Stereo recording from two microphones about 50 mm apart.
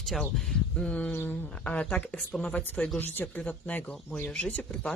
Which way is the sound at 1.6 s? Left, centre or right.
Left.